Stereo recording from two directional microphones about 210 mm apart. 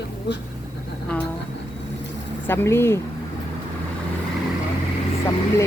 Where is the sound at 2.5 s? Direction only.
10° left (ahead or behind).